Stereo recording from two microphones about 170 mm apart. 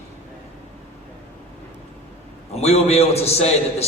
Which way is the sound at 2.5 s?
40° left (ahead or behind).